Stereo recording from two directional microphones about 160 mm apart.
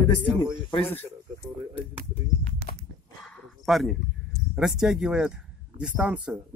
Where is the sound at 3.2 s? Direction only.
Centre (ahead or behind).